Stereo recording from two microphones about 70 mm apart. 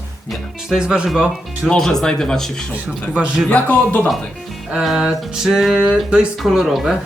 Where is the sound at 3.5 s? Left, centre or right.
Left.